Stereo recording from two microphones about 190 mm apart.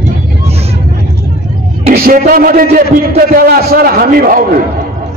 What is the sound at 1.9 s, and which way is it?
A man's voice, 45° right (ahead or behind).